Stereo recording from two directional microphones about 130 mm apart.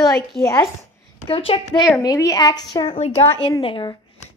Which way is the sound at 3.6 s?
40° left (ahead or behind).